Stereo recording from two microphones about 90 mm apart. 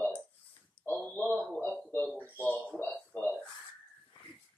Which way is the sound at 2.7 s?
25° left (ahead or behind).